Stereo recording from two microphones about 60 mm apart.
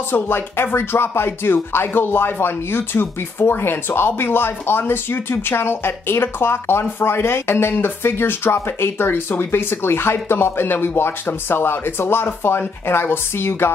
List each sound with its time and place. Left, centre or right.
0.1 s speech: left